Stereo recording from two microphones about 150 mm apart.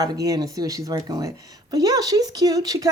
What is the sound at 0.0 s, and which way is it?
Speech, 25° right (ahead or behind).